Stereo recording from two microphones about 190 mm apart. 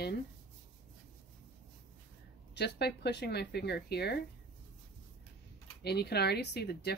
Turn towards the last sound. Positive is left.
turn(degrees=60)  # may be behind; listen again after turning